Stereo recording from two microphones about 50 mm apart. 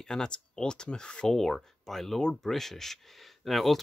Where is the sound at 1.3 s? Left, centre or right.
Centre.